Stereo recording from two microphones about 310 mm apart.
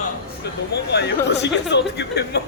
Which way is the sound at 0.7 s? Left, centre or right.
Left.